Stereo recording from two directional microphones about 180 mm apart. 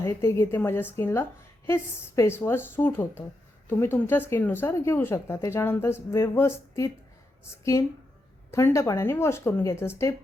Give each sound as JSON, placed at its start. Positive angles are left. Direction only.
{"t": 0.0, "sound": "a woman's voice", "side_deg": 15}